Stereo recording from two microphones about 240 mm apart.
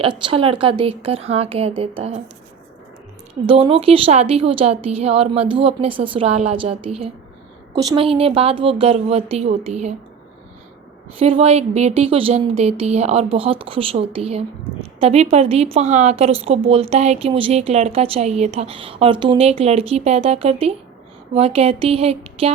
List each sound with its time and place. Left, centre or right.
0.3 s a woman's voice: right
3.4 s a woman's voice: right
11.2 s a woman's voice: right